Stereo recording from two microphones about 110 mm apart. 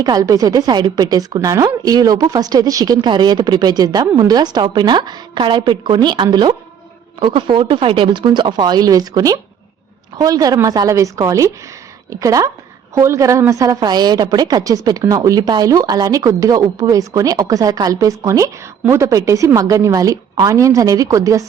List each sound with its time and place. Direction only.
0.0 s a woman's voice: 35° right (ahead or behind)